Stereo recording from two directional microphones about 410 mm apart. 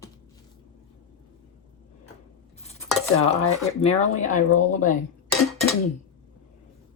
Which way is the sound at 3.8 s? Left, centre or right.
Centre.